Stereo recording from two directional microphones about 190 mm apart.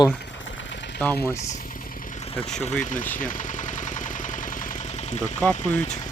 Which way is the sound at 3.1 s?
45° left (ahead or behind).